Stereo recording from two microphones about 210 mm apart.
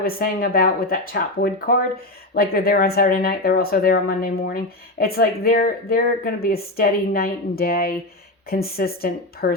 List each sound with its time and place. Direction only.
0.0 s speech: 45° left (ahead or behind)